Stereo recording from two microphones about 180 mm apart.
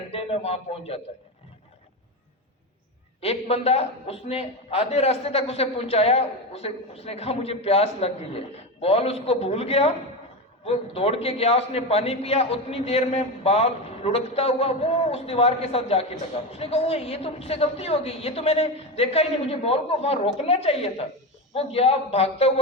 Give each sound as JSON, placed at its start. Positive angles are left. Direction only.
{"t": 0.1, "sound": "a man's voice", "side_deg": 35}
{"t": 3.2, "sound": "a man's voice", "side_deg": 35}